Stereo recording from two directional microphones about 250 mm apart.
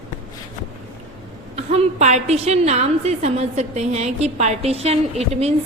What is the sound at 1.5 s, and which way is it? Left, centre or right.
A woman's voice, right.